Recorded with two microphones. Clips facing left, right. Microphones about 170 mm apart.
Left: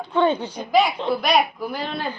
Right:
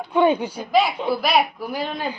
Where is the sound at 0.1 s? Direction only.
10° right (ahead or behind).